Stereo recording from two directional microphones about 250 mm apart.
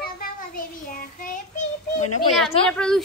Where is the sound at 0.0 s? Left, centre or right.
Left.